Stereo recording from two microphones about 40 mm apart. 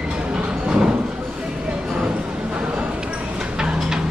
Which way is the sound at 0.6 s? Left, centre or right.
Right.